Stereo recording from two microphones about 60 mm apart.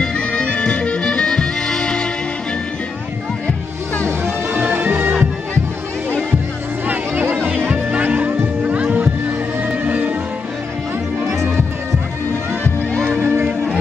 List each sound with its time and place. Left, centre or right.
0.0 s music: centre
4.6 s music: right
7.7 s music: right
13.1 s music: right